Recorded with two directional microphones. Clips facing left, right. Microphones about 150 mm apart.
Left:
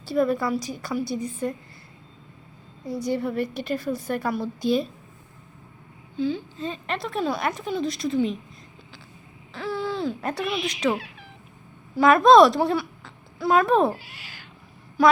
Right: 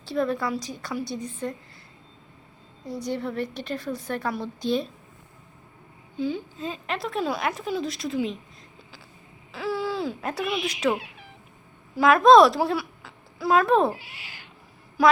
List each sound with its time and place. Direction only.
0.0 s a woman's voice: 5° left (ahead or behind)
2.8 s a woman's voice: 5° left (ahead or behind)
6.1 s speech: 15° right (ahead or behind)
6.6 s a woman's voice: centre (ahead or behind)
9.5 s a woman's voice: 5° right (ahead or behind)
14.0 s speech: 20° right (ahead or behind)
15.0 s a sound: 5° right (ahead or behind)